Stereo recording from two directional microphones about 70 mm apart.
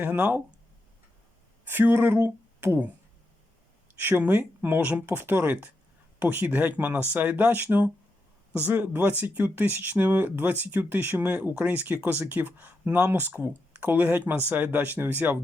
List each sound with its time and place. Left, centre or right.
0.0 s speech: right
1.6 s speech: right
4.0 s speech: right